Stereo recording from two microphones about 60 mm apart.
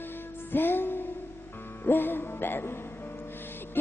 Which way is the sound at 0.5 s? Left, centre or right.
Left.